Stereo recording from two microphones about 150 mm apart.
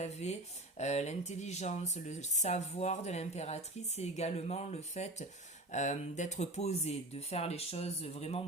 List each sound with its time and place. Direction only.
0.0 s speech: 50° left (ahead or behind)